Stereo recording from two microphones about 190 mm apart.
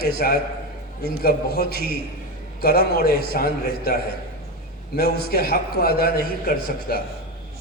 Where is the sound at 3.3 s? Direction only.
55° left (ahead or behind).